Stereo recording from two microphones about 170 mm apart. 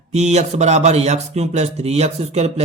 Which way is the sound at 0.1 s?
40° right (ahead or behind).